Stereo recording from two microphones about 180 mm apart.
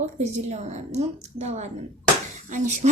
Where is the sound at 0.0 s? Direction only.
40° right (ahead or behind).